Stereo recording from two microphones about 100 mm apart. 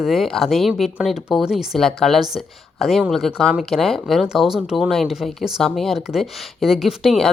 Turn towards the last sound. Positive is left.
turn(degrees=0)  # may be behind; listen again after turning